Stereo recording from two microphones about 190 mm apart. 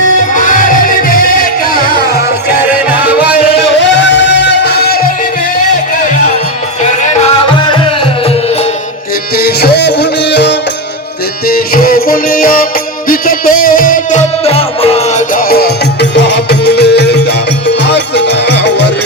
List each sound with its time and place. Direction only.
0.3 s music: 45° left (ahead or behind)
4.0 s music: 70° left (ahead or behind)
7.6 s music: 25° left (ahead or behind)
9.4 s music: 60° left (ahead or behind)
11.4 s music: 50° left (ahead or behind)
14.4 s music: 30° left (ahead or behind)
15.4 s music: 55° left (ahead or behind)